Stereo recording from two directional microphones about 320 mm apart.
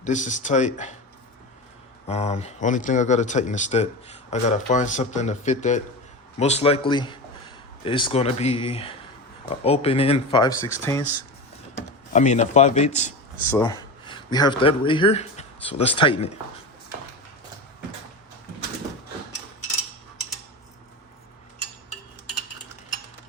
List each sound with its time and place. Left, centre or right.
0.0 s speech: left
2.0 s speech: centre
12.1 s speech: left